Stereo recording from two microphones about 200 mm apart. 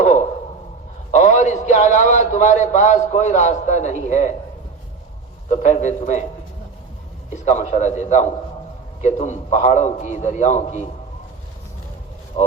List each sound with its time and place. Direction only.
1.1 s a man's voice: 40° left (ahead or behind)
5.6 s a man's voice: 35° left (ahead or behind)
7.4 s a man's voice: 35° left (ahead or behind)